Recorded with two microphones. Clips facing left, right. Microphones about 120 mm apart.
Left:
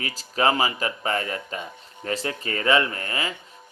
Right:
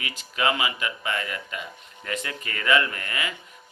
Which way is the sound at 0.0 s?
35° left (ahead or behind).